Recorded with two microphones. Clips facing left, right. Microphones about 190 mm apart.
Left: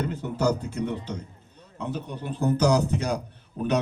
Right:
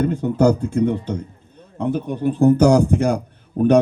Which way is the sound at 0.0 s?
50° right (ahead or behind).